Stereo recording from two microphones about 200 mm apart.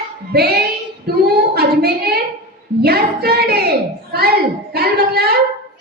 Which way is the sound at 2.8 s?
50° right (ahead or behind).